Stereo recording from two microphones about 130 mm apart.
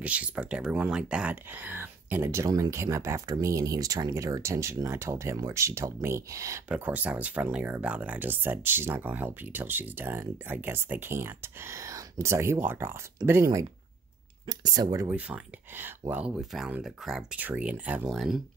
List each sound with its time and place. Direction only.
0.0 s speech: 10° right (ahead or behind)
6.7 s speech: 10° right (ahead or behind); by 15.0 s 30° right (ahead or behind)
15.0 s speech: 10° right (ahead or behind)